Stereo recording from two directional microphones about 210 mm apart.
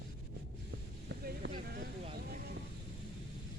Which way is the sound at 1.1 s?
50° right (ahead or behind).